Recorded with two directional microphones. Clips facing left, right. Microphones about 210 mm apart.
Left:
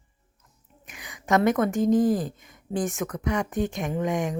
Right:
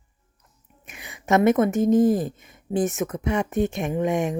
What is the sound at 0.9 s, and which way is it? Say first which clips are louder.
Speech: right 2 dB; 25° right (ahead or behind).